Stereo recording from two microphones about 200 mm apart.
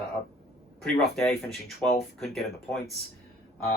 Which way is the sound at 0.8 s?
Centre (ahead or behind).